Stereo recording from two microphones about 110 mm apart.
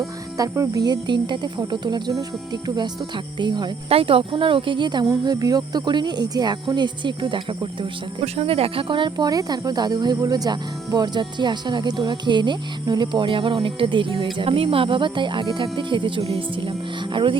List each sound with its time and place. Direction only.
0.3 s speech: 30° right (ahead or behind)
3.8 s speech: 60° right (ahead or behind)
8.2 s speech: 65° right (ahead or behind)